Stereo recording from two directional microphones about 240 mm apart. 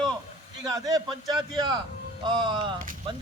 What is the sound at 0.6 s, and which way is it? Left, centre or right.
A man's voice, centre.